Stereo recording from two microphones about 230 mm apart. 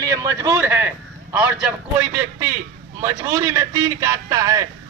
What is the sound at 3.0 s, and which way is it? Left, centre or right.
A man's voice, centre.